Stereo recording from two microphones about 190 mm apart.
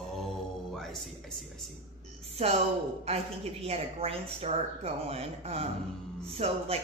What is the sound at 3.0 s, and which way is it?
Speech, 30° right (ahead or behind).